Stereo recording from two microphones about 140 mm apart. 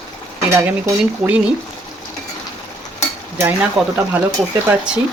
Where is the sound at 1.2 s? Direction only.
5° right (ahead or behind).